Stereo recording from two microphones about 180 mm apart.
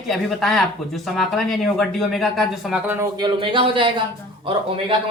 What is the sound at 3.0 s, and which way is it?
Speech, 25° right (ahead or behind).